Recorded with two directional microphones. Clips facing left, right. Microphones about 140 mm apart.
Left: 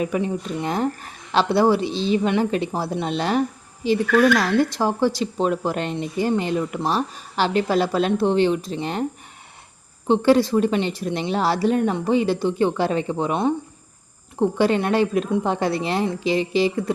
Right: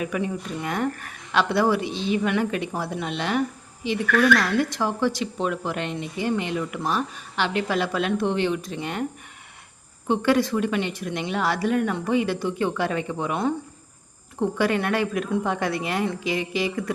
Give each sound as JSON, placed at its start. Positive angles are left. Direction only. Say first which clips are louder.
{"t": 0.0, "sound": "a woman's voice", "louder": "left 4 dB", "side_deg": 25}
{"t": 4.1, "sound": "speech", "louder": "left 2 dB", "side_deg": 20}
{"t": 10.1, "sound": "a woman's voice", "louder": "left 5 dB", "side_deg": 30}